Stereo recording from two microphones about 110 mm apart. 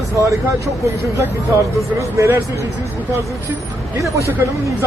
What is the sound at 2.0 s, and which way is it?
Speech, 25° right (ahead or behind).